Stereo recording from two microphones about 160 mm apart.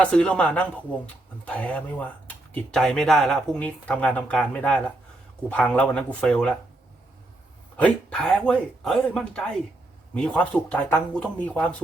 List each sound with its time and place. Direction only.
0.0 s speech: 5° left (ahead or behind)
7.8 s speech: 5° left (ahead or behind)